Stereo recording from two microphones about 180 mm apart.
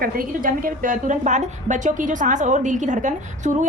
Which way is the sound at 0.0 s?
50° right (ahead or behind).